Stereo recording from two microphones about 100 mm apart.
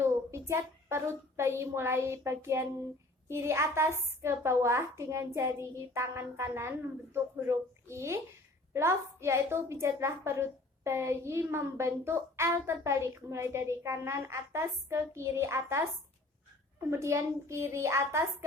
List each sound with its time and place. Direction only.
0.0 s a woman's voice: 25° right (ahead or behind)
16.9 s a woman's voice: 30° right (ahead or behind)